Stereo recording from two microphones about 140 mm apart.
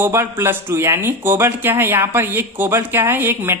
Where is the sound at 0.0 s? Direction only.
20° right (ahead or behind).